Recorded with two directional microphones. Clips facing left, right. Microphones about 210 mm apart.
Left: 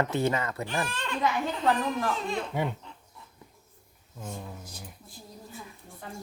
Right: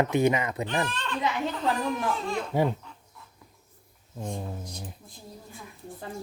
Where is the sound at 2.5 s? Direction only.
35° right (ahead or behind).